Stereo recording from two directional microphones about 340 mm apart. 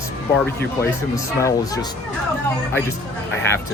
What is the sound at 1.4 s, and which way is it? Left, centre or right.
Speech, centre.